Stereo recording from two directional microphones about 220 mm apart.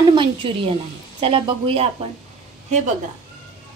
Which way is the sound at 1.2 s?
25° right (ahead or behind).